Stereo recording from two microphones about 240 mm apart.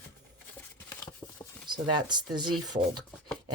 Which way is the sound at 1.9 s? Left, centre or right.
Centre.